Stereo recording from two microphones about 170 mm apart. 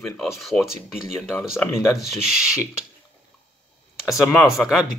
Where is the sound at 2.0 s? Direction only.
5° right (ahead or behind).